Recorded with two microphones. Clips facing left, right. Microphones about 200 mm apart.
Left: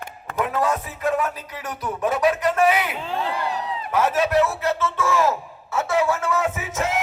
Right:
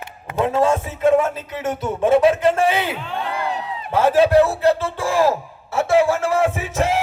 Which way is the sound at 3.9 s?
30° right (ahead or behind).